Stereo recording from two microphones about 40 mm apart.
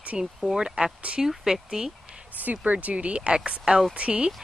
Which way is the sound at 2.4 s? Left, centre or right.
Right.